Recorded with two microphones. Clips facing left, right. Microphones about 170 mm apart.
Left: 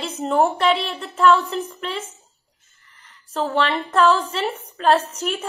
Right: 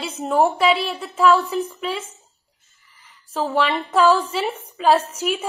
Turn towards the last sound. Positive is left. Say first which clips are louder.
# right 1 dB
turn(degrees=-5)  # may be behind; listen again after turning